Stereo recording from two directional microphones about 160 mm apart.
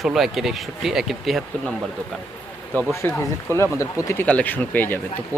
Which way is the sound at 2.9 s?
15° left (ahead or behind).